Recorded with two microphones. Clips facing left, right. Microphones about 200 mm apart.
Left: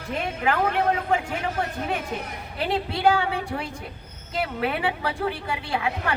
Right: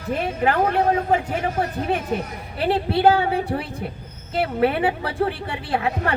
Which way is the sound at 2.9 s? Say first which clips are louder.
Right 5 dB; 30° right (ahead or behind).